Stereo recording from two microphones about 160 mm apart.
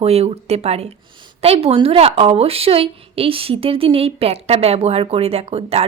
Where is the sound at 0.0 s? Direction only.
40° right (ahead or behind).